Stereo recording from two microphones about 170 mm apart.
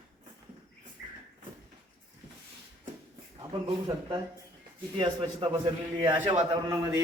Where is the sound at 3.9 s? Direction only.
20° right (ahead or behind).